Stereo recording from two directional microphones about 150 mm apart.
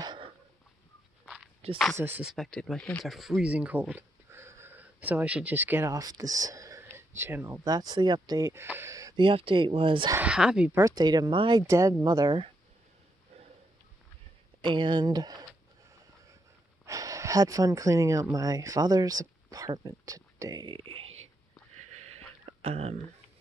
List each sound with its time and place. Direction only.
0.0 s a sound: 30° right (ahead or behind)
1.2 s walk: 5° right (ahead or behind)
2.0 s speech: 15° right (ahead or behind)
2.2 s speech: centre (ahead or behind); by 9.2 s 20° right (ahead or behind)
9.2 s speech: 35° right (ahead or behind)
10.1 s speech: 5° right (ahead or behind)
10.8 s speech: 25° right (ahead or behind)
11.6 s speech: 20° right (ahead or behind)
14.6 s speech: 35° right (ahead or behind)
16.8 s speech: 20° right (ahead or behind); by 21.1 s 35° right (ahead or behind)
21.9 s a sound: 45° right (ahead or behind)